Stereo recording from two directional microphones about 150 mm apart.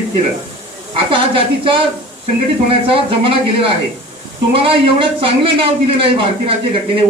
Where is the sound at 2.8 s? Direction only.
35° right (ahead or behind).